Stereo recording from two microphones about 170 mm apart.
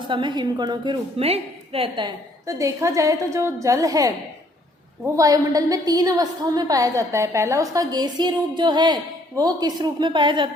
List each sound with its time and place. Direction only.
0.0 s a woman's voice: 30° right (ahead or behind)
5.1 s a woman's voice: 20° right (ahead or behind)